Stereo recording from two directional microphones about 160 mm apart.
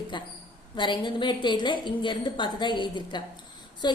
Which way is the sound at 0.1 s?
30° left (ahead or behind).